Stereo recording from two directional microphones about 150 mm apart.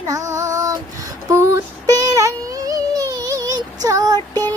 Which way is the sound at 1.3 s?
20° right (ahead or behind).